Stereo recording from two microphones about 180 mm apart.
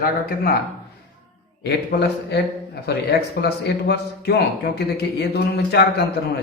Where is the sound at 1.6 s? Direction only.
70° left (ahead or behind).